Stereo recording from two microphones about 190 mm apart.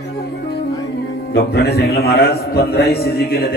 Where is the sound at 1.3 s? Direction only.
55° left (ahead or behind).